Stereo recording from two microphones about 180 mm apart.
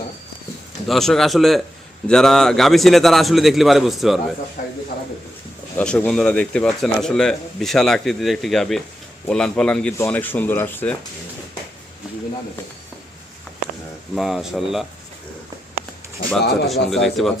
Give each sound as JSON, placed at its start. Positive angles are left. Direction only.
{"t": 0.9, "sound": "speech", "side_deg": 0}
{"t": 4.6, "sound": "speech", "side_deg": 55}
{"t": 5.7, "sound": "speech", "side_deg": 10}
{"t": 14.2, "sound": "speech", "side_deg": 0}
{"t": 16.6, "sound": "speech", "side_deg": 0}